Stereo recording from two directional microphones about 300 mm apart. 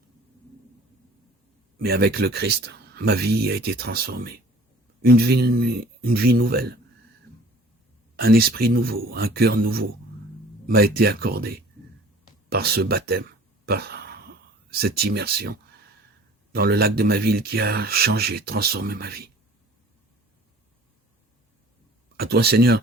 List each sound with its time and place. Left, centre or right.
1.8 s speech: right
8.1 s speech: right
13.7 s a sound: right
14.7 s speech: right
22.2 s speech: right